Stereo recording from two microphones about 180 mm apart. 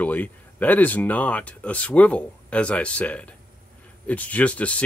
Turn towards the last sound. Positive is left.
turn(degrees=5)  # may be behind; listen again after turning